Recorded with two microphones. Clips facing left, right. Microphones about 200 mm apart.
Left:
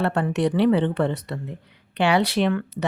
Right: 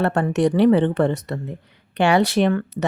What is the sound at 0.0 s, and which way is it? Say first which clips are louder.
Speech: right 3 dB; 45° right (ahead or behind).